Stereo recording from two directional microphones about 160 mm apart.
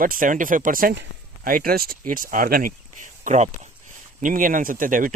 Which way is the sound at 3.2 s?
45° right (ahead or behind).